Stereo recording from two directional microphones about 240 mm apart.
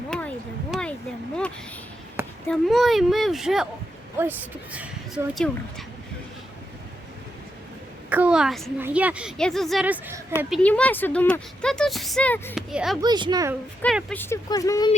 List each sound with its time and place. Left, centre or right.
0.7 s a sound: centre
2.5 s speech: centre
8.1 s speech: centre
10.5 s speech: centre
13.0 s a woman's voice: centre
13.8 s speech: centre